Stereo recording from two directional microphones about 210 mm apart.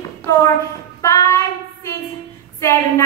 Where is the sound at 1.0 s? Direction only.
15° left (ahead or behind).